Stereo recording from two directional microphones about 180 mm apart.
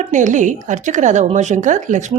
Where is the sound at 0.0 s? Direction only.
45° right (ahead or behind).